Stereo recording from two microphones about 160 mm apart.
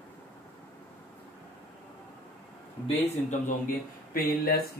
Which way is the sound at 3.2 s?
55° left (ahead or behind).